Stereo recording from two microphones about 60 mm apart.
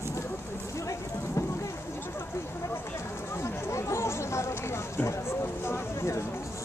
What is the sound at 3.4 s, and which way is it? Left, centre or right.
Chatter, left.